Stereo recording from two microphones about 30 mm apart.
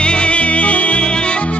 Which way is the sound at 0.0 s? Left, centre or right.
Left.